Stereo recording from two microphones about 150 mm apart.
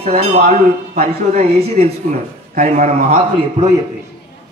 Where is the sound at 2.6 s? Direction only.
65° right (ahead or behind).